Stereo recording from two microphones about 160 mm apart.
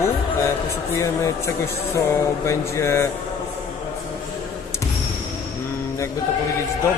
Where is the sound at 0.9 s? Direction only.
20° left (ahead or behind).